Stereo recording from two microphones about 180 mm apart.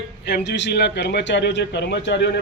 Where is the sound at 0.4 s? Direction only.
75° left (ahead or behind).